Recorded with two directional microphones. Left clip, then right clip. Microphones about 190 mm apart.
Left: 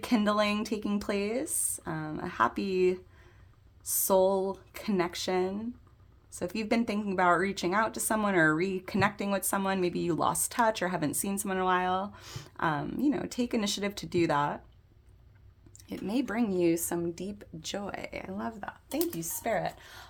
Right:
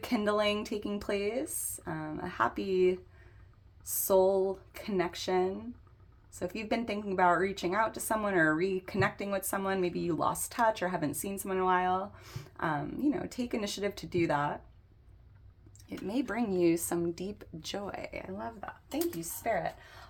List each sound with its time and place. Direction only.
0.0 s speech: 30° left (ahead or behind)
4.0 s a woman's voice: 30° left (ahead or behind)
15.9 s speech: 25° left (ahead or behind); by 20.1 s 45° left (ahead or behind)